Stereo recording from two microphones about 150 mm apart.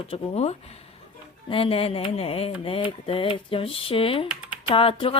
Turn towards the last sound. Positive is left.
turn(degrees=35)  # may be behind; listen again after turning